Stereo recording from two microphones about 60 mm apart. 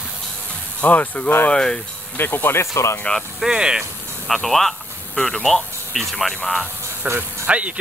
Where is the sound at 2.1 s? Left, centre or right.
Left.